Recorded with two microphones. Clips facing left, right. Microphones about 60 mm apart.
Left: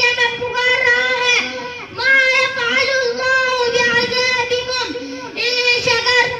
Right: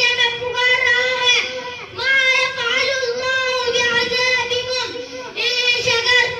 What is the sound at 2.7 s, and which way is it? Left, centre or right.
Child singing, left.